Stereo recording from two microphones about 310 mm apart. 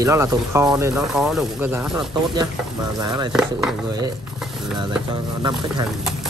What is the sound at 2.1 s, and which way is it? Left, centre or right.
Speech, centre.